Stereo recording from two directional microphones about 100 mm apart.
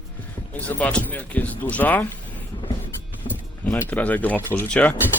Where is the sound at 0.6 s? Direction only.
15° left (ahead or behind).